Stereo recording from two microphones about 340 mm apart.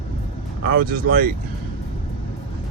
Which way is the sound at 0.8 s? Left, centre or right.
Right.